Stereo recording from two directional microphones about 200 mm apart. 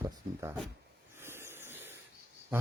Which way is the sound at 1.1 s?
10° right (ahead or behind).